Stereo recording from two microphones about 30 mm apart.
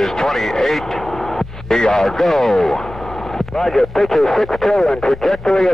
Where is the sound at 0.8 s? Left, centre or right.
Centre.